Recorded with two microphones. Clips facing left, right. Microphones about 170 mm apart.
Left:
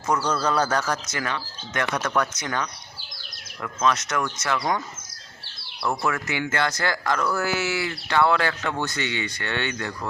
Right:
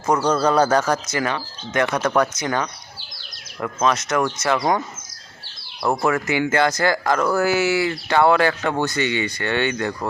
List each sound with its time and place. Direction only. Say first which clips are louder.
0.0 s speech: right 5 dB; 35° right (ahead or behind)
1.1 s speech: right 6 dB; 20° right (ahead or behind)
2.0 s speech: right 6 dB; 35° right (ahead or behind)
3.6 s speech: right 3 dB; 50° right (ahead or behind)
4.1 s speech: right 6 dB; 40° right (ahead or behind)
5.8 s speech: right 5 dB; 45° right (ahead or behind)
6.2 s speech: right 7 dB; 10° right (ahead or behind)
7.0 s speech: right 5 dB; 45° right (ahead or behind)
7.4 s speech: right 7 dB; 10° right (ahead or behind)
7.8 s speech: right 5 dB; 70° right (ahead or behind)
8.2 s speech: right 5 dB; 60° right (ahead or behind)
9.6 s speech: right 7 dB; 70° right (ahead or behind)